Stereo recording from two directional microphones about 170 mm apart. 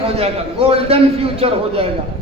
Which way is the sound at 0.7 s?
35° right (ahead or behind).